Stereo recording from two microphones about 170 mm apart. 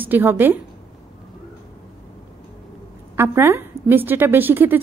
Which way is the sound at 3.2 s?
15° right (ahead or behind).